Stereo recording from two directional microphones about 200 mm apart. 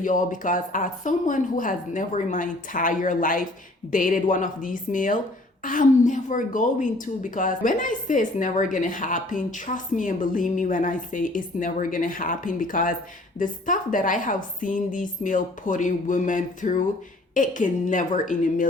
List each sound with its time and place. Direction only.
0.0 s a woman's voice: 40° left (ahead or behind)